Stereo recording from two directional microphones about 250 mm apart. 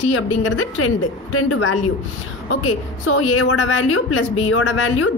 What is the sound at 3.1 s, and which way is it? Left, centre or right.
A woman's voice, left.